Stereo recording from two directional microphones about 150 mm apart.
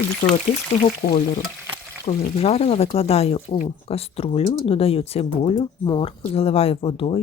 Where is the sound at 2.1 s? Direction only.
45° left (ahead or behind).